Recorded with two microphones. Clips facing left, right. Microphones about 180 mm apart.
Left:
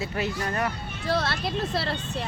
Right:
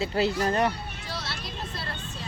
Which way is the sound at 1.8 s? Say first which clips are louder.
Left 8 dB; 80° left.